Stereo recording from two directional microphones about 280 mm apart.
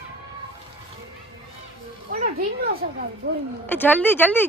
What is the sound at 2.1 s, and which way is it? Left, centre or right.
A child's voice, right.